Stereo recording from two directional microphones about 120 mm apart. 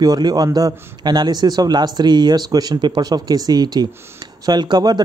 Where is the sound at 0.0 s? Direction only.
30° right (ahead or behind).